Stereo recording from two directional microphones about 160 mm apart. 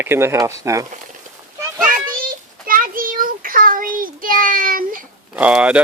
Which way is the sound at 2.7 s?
60° right (ahead or behind).